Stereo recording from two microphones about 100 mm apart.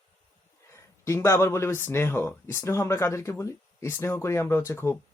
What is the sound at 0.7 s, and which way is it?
Speech, 30° left (ahead or behind).